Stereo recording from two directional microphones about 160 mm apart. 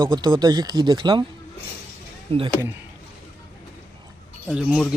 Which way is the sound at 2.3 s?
35° right (ahead or behind).